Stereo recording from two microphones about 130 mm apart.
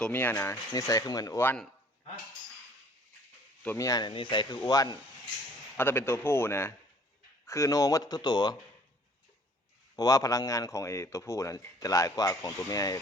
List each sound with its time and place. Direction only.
0.0 s a man's voice: 15° left (ahead or behind)
3.8 s speech: 30° left (ahead or behind)
5.7 s a man's voice: 15° left (ahead or behind); by 8.5 s 35° left (ahead or behind)
9.9 s speech: 25° left (ahead or behind)